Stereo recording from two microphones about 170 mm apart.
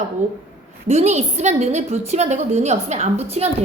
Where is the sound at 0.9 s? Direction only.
40° right (ahead or behind).